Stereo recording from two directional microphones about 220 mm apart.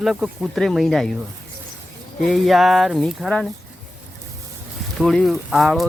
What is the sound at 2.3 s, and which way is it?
Speech, centre (ahead or behind).